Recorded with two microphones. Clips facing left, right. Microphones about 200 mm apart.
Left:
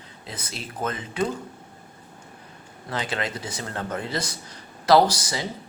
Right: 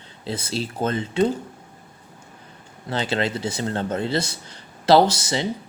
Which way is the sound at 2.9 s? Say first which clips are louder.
Right 5 dB; 30° right (ahead or behind).